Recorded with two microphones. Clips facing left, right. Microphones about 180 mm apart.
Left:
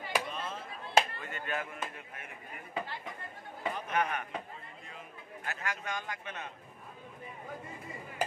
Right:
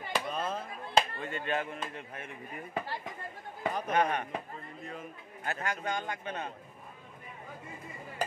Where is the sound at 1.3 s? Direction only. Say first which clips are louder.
Right 4 dB; 25° right (ahead or behind).